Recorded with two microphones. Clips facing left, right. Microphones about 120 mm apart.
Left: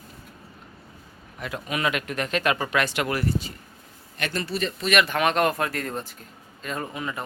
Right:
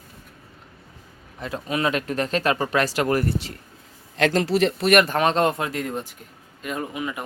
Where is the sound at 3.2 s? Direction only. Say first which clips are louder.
Right 1 dB; 80° right.